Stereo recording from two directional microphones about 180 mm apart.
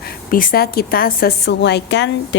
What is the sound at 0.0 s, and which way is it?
A woman's voice, 50° left (ahead or behind).